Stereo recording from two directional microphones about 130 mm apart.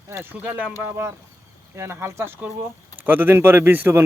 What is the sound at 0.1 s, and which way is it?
Speech, 15° right (ahead or behind).